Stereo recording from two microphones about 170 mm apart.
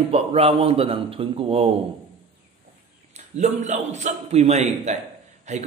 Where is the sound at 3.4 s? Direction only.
40° right (ahead or behind).